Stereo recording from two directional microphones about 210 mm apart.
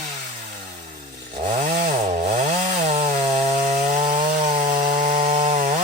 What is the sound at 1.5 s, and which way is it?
Chainsaw, 40° right (ahead or behind).